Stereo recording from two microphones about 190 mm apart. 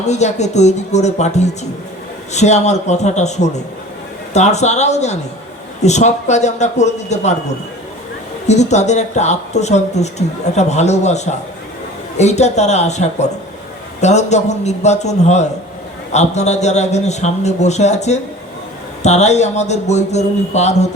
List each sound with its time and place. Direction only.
0.0 s speech: 35° left (ahead or behind)
8.4 s speech: 35° left (ahead or behind)